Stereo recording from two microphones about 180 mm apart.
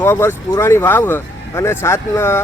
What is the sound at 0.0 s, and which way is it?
Speech, 10° left (ahead or behind).